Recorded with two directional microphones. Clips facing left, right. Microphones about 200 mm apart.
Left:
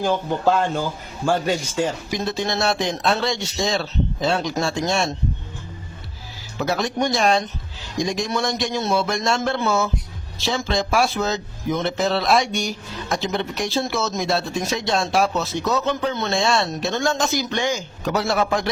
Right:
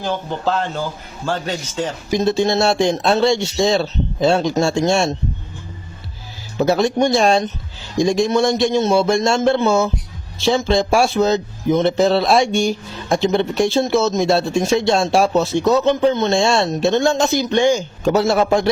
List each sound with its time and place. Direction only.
0.0 s a man's voice: 10° left (ahead or behind)
2.0 s speech: 25° right (ahead or behind)
6.6 s speech: 30° right (ahead or behind)